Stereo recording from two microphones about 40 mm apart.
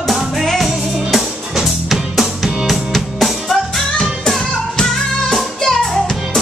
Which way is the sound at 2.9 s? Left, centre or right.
Centre.